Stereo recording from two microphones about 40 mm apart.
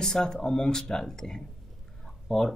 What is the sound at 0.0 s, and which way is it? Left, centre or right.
Speech, centre.